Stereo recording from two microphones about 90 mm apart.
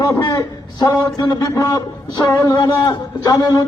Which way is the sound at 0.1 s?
35° left (ahead or behind).